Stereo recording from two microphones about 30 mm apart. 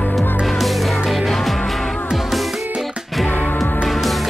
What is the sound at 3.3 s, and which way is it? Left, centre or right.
Music, left.